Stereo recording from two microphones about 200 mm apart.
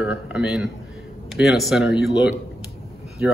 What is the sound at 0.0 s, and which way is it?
A man's voice, 5° right (ahead or behind).